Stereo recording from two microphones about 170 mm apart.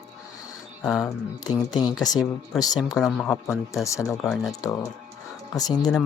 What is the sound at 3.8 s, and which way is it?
Speech, 20° left (ahead or behind).